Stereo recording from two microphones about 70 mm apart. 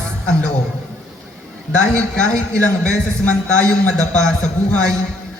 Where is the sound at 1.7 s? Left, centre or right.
Centre.